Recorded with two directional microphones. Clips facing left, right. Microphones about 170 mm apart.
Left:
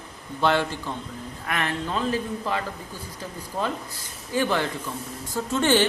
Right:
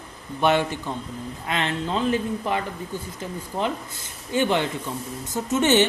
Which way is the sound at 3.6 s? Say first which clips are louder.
Right 1 dB; 25° right (ahead or behind).